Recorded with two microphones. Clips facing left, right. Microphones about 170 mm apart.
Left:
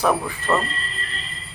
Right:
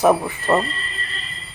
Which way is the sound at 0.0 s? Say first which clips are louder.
Right 5 dB; 20° right (ahead or behind).